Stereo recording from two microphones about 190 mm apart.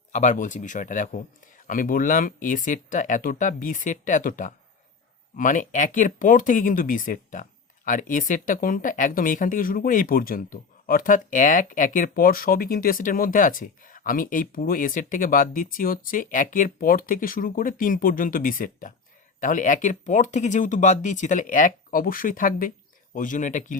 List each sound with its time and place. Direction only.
0.1 s speech: 40° left (ahead or behind)